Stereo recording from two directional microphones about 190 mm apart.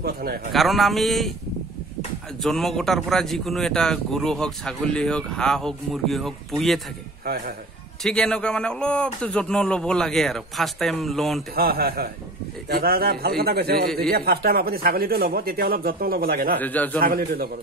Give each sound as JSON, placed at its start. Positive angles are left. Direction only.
{"t": 0.0, "sound": "speech", "side_deg": -55}
{"t": 0.5, "sound": "speech", "side_deg": 0}
{"t": 2.4, "sound": "speech", "side_deg": 0}
{"t": 7.3, "sound": "speech", "side_deg": -55}
{"t": 8.0, "sound": "speech", "side_deg": 5}
{"t": 11.5, "sound": "a man's voice", "side_deg": -50}
{"t": 16.5, "sound": "a man's voice", "side_deg": 10}
{"t": 17.0, "sound": "speech", "side_deg": -50}